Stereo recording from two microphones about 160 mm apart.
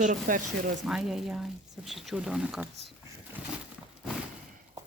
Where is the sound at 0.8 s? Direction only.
5° right (ahead or behind).